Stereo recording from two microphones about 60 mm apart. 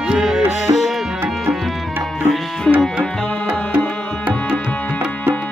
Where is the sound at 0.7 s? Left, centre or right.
Right.